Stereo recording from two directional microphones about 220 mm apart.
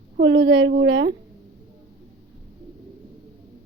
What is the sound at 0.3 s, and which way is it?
Speech, 55° right (ahead or behind).